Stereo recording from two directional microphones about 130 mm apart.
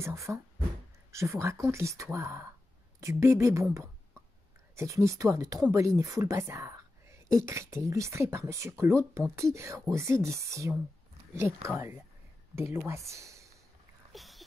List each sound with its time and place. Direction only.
0.0 s a woman's voice: 20° right (ahead or behind)
4.7 s a woman's voice: 25° right (ahead or behind)
14.1 s a sound: centre (ahead or behind)